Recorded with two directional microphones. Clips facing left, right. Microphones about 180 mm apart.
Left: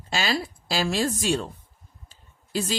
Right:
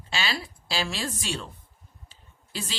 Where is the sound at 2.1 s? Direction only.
45° left (ahead or behind).